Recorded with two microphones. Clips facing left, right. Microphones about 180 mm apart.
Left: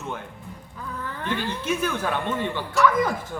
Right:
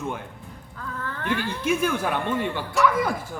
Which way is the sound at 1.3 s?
10° right (ahead or behind).